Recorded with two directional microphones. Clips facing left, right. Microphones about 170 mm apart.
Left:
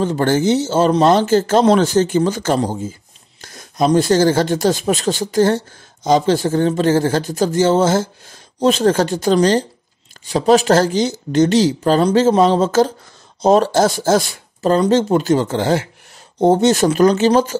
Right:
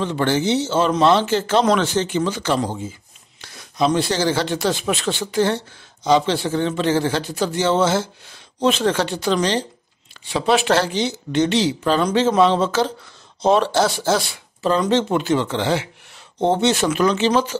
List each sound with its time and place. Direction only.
0.0 s a man's voice: 45° left (ahead or behind)